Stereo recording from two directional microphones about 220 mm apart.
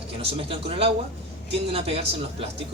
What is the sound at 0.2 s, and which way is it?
A man's voice, 25° right (ahead or behind).